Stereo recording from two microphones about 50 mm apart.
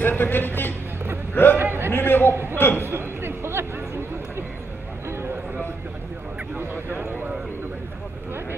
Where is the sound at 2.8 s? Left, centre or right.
Right.